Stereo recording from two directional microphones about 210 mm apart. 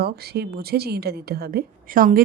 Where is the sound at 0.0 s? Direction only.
50° right (ahead or behind).